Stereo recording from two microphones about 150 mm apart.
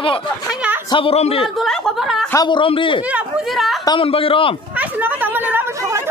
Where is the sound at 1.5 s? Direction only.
5° left (ahead or behind).